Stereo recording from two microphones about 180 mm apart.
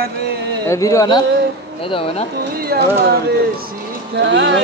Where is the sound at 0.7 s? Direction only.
15° left (ahead or behind).